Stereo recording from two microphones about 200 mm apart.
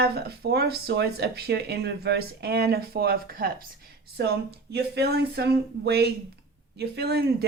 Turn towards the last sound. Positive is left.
turn(degrees=-50)  # may be behind; listen again after turning